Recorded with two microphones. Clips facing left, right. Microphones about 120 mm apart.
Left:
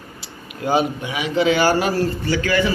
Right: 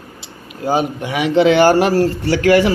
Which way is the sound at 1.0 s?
75° right (ahead or behind).